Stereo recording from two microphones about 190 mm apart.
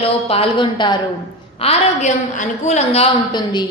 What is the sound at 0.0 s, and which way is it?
A woman's voice, 30° left (ahead or behind).